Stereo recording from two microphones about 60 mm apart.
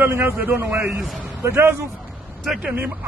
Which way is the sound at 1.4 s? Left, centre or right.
Right.